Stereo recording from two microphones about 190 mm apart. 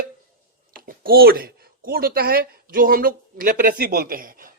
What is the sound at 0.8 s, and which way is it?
Speech, 50° right (ahead or behind).